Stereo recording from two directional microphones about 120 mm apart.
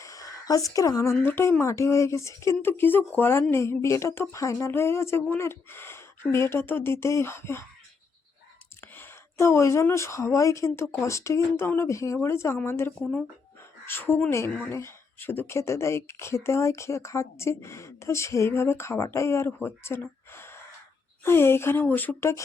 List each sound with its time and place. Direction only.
0.0 s a sound: 30° left (ahead or behind)
1.2 s speech: 20° left (ahead or behind)
8.8 s speech: 20° left (ahead or behind)
13.0 s speech: 5° left (ahead or behind)
13.8 s speech: 20° left (ahead or behind)